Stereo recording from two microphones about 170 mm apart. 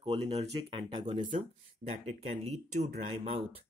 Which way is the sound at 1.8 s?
40° right (ahead or behind).